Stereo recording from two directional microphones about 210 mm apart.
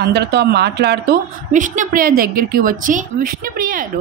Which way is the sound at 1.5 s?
35° right (ahead or behind).